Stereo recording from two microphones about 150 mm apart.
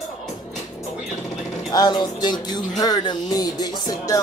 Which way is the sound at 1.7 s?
25° left (ahead or behind).